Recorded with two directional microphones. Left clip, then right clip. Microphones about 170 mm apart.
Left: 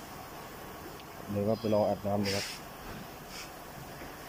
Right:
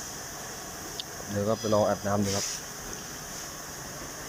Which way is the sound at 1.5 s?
Centre (ahead or behind).